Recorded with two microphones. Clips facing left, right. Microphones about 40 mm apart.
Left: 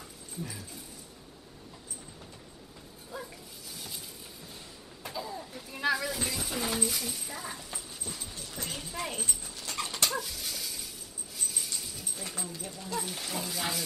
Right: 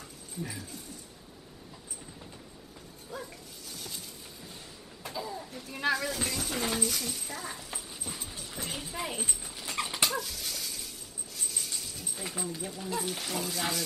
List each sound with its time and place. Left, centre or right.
0.6 s speech: centre
3.1 s dog: centre
5.0 s speech: centre
7.7 s a sound: centre
9.4 s dog: centre
10.0 s a sound: centre
12.2 s speech: centre
12.8 s speech: centre